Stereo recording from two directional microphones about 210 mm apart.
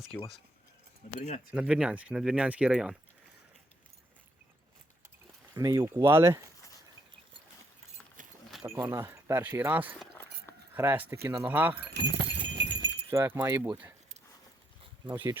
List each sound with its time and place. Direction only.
0.1 s speech: 5° left (ahead or behind)
1.5 s speech: 5° right (ahead or behind)
5.5 s speech: 15° right (ahead or behind)
8.4 s keys jangling: centre (ahead or behind)
8.7 s speech: 15° right (ahead or behind)
11.9 s clip-clop: 55° right (ahead or behind)
13.1 s speech: 10° right (ahead or behind)
15.0 s speech: 10° right (ahead or behind)